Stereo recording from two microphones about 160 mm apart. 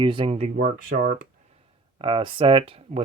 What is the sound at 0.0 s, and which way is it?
Speech, 30° right (ahead or behind).